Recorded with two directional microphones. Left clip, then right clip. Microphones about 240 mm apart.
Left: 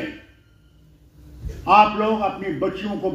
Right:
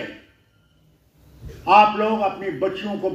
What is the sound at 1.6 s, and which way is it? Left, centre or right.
A man's voice, right.